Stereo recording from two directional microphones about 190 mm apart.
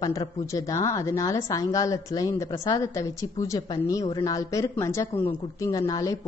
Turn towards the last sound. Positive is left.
turn(degrees=20)  # may be behind; listen again after turning